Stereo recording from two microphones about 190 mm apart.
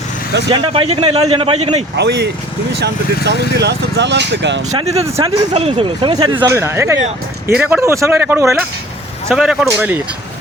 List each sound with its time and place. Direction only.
0.5 s a man's voice: 30° right (ahead or behind)
2.0 s speech: 60° right (ahead or behind)
4.8 s a man's voice: 30° right (ahead or behind); by 10.0 s 10° right (ahead or behind)